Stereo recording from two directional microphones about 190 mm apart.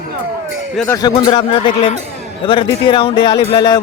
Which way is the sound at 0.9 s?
20° left (ahead or behind).